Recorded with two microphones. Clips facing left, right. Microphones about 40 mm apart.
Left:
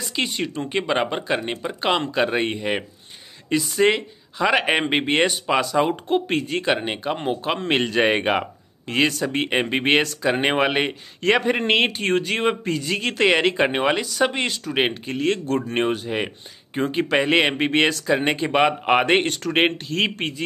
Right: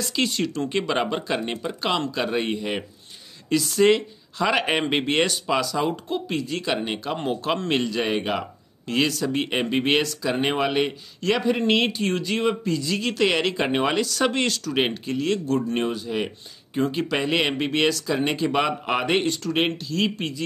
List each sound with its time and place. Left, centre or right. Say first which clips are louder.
0.0 s speech: right 1 dB; left
1.8 s speech: left 5 dB; left
6.6 s speech: left 3 dB; left
7.7 s speech: left 7 dB; left